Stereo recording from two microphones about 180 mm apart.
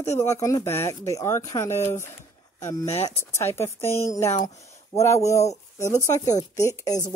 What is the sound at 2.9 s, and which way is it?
Speech, 35° left (ahead or behind).